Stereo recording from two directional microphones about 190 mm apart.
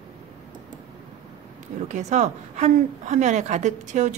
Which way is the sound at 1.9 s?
40° right (ahead or behind).